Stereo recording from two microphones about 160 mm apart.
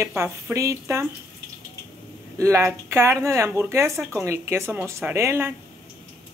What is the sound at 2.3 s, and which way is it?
Speech, 20° right (ahead or behind).